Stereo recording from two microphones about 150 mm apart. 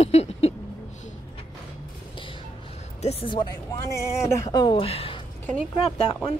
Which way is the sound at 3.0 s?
40° left (ahead or behind).